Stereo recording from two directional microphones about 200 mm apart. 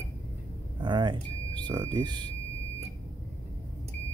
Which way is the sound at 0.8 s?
25° right (ahead or behind).